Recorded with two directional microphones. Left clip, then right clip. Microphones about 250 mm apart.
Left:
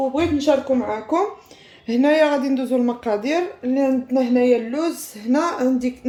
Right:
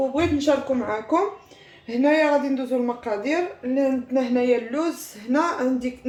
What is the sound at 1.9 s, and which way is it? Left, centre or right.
Speech, left.